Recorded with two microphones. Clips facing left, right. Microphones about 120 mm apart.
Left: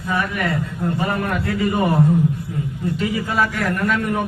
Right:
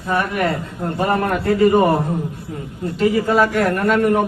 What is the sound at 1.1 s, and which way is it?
Speech, 50° right (ahead or behind).